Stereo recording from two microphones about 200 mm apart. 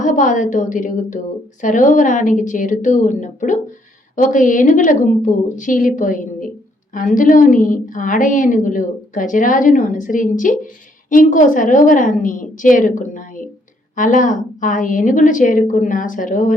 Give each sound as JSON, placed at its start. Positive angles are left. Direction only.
{"t": 0.0, "sound": "a woman's voice", "side_deg": 40}